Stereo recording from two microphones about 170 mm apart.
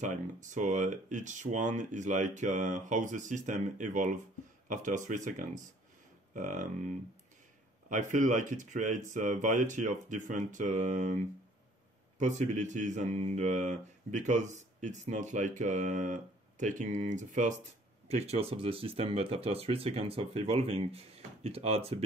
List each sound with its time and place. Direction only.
0.0 s speech: 45° right (ahead or behind)
12.2 s speech: 45° right (ahead or behind)